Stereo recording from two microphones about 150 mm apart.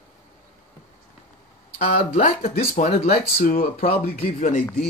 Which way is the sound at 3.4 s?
70° left (ahead or behind).